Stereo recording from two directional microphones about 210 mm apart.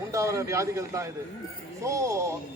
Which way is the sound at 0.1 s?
15° right (ahead or behind).